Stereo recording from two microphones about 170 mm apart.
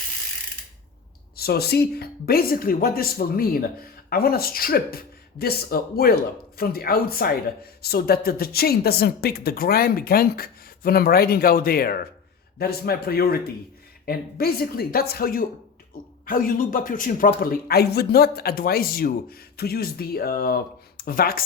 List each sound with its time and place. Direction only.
1.4 s a man's voice: 65° left (ahead or behind)